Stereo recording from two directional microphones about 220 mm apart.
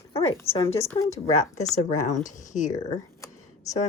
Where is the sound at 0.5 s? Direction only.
25° left (ahead or behind).